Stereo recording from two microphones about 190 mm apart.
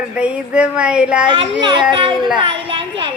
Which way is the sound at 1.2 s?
25° right (ahead or behind).